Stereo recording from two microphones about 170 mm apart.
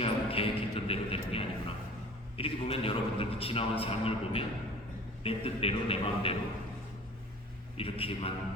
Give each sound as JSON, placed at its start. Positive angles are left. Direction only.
{"t": 0.0, "sound": "music", "side_deg": 35}
{"t": 2.4, "sound": "a man's voice", "side_deg": 35}
{"t": 7.8, "sound": "speech", "side_deg": 35}